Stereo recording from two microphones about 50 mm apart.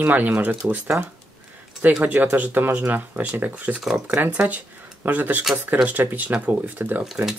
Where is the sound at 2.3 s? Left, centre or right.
Right.